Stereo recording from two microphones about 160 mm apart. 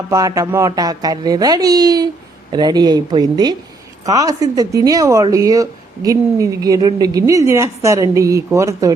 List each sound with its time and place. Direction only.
0.1 s speech: 20° right (ahead or behind)